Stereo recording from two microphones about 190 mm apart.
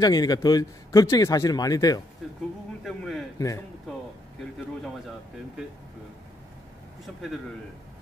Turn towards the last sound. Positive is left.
turn(degrees=5)  # may be behind; listen again after turning